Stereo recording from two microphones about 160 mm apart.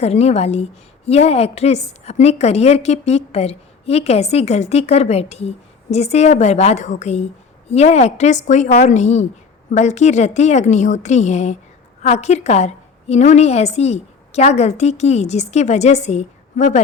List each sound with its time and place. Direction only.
0.0 s a woman's voice: 40° left (ahead or behind)